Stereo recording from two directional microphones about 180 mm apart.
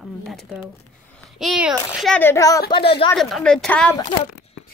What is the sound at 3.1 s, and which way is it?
Speech, centre (ahead or behind).